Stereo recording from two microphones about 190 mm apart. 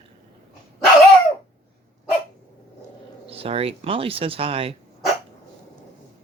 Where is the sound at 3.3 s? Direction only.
30° right (ahead or behind).